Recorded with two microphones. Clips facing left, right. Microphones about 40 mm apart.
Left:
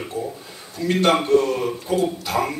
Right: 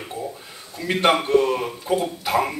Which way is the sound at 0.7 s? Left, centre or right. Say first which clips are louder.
Left 1 dB; centre.